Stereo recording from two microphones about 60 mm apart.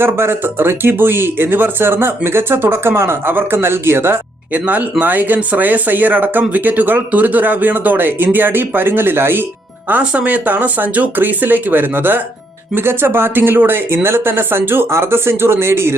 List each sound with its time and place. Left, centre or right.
0.0 s speech: right
4.5 s speech: right
9.9 s speech: right